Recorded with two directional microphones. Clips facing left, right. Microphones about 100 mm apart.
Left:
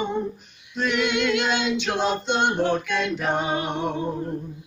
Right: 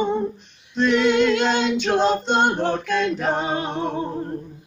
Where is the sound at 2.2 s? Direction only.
45° right (ahead or behind).